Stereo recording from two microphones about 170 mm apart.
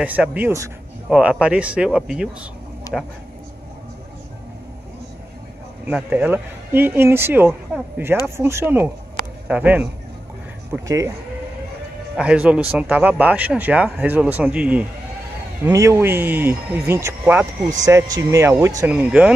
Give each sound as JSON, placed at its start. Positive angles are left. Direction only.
{"t": 0.0, "sound": "speech", "side_deg": -10}
{"t": 1.0, "sound": "speech", "side_deg": -5}
{"t": 2.9, "sound": "vehicle", "side_deg": 20}
{"t": 5.9, "sound": "speech", "side_deg": -10}
{"t": 12.2, "sound": "speech", "side_deg": -5}
{"t": 15.6, "sound": "speech", "side_deg": -20}